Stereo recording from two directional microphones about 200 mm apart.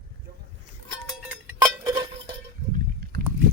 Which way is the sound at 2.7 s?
50° right (ahead or behind).